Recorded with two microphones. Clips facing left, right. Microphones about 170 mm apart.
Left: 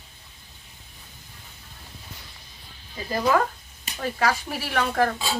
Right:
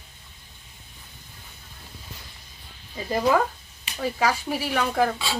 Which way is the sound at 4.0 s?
10° right (ahead or behind).